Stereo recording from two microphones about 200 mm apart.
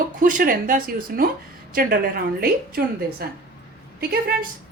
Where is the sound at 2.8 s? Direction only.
50° right (ahead or behind).